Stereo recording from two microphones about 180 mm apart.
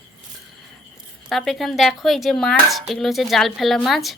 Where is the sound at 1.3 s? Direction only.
Centre (ahead or behind).